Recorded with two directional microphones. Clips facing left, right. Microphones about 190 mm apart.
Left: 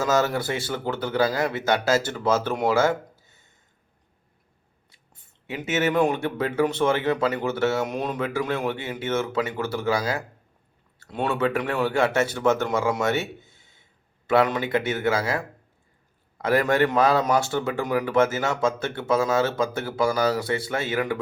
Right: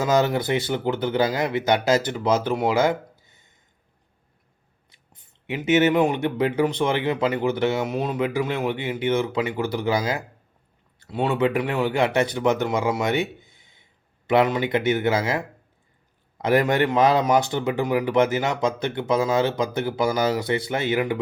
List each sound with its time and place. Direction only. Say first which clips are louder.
0.0 s speech: right 2 dB; 20° right (ahead or behind)
5.6 s speech: right 3 dB; 20° right (ahead or behind)
16.4 s speech: right 1 dB; 20° right (ahead or behind)